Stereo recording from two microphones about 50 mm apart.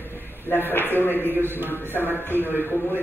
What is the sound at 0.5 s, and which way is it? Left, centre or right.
Speech, left.